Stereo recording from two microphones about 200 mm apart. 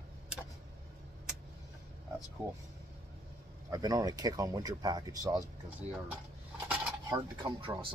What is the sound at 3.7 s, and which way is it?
Speech, 20° right (ahead or behind).